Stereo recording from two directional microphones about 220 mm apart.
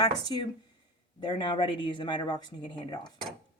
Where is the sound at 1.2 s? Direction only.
20° left (ahead or behind).